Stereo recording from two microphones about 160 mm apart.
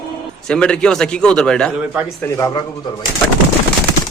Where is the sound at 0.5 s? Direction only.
5° left (ahead or behind).